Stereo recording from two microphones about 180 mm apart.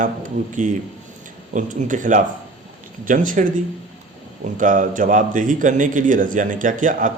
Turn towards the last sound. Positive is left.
turn(degrees=-45)  # may be behind; listen again after turning